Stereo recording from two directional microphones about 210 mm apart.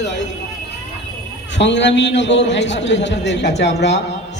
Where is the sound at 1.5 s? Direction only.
60° left (ahead or behind).